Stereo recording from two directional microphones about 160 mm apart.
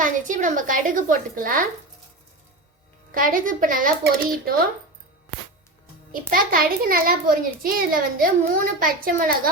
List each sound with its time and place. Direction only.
0.0 s a child's voice: 55° right (ahead or behind)
3.2 s a child's voice: 60° right (ahead or behind)
6.3 s a child's voice: 65° right (ahead or behind)